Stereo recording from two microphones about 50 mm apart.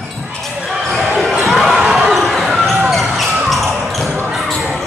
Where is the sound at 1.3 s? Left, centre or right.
Centre.